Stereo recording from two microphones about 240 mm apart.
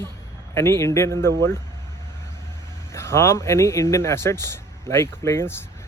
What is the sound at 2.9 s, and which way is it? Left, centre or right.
Speech, centre.